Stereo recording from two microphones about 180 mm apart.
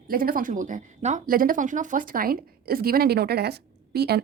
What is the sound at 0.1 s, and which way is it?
A woman's voice, 55° right (ahead or behind).